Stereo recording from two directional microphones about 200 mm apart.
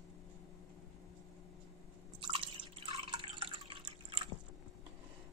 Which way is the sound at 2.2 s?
25° right (ahead or behind).